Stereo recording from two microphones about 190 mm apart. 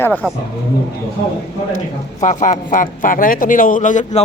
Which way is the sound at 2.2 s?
40° left (ahead or behind).